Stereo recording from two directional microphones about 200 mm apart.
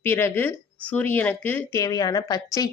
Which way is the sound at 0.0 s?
10° left (ahead or behind).